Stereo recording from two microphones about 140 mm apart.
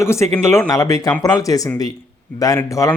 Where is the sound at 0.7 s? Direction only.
25° left (ahead or behind).